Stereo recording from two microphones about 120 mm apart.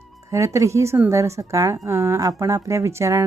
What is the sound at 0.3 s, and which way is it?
A woman's voice, 25° right (ahead or behind).